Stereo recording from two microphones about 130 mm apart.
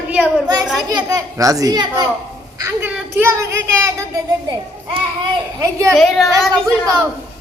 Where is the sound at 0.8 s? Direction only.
30° right (ahead or behind).